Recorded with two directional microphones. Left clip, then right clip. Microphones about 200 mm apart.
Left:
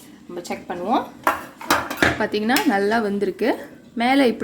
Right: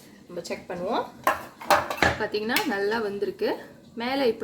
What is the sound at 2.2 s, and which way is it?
A woman's voice, 35° left (ahead or behind).